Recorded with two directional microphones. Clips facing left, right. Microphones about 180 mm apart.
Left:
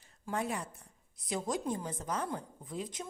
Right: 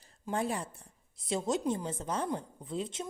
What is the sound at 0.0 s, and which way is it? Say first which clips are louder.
A woman's voice: right 3 dB; 30° right (ahead or behind).